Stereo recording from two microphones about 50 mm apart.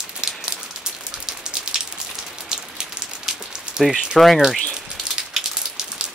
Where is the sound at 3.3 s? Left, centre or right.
Centre.